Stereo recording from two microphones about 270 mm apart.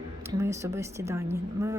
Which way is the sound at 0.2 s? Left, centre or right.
Centre.